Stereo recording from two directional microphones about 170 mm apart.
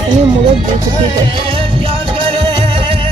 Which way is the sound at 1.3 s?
30° right (ahead or behind).